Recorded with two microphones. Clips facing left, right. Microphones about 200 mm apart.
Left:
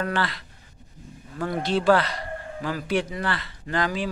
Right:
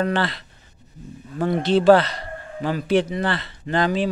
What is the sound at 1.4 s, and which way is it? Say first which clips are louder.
A man's voice: right 6 dB; 25° right (ahead or behind).